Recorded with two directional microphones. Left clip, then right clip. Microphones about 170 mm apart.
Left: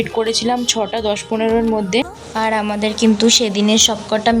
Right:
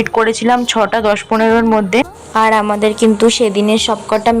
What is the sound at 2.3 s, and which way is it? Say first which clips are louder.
A woman's voice: right 7 dB; 30° right (ahead or behind).